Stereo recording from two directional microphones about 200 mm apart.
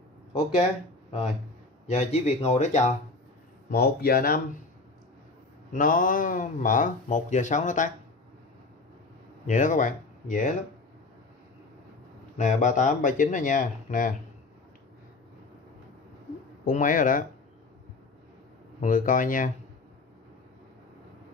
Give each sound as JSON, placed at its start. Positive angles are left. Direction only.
{"t": 0.3, "sound": "speech", "side_deg": 30}
{"t": 1.9, "sound": "speech", "side_deg": 30}
{"t": 3.7, "sound": "speech", "side_deg": 50}
{"t": 5.7, "sound": "speech", "side_deg": 45}
{"t": 9.5, "sound": "speech", "side_deg": 40}
{"t": 12.4, "sound": "speech", "side_deg": 40}
{"t": 16.6, "sound": "speech", "side_deg": 40}
{"t": 18.8, "sound": "speech", "side_deg": 40}